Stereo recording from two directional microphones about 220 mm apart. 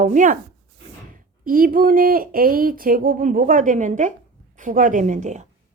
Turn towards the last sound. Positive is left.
turn(degrees=-35)  # may be behind; listen again after turning